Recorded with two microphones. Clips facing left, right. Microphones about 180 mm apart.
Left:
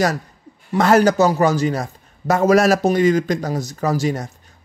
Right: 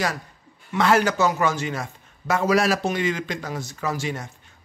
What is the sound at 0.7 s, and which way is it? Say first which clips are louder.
A man's voice: left 6 dB; 40° left (ahead or behind).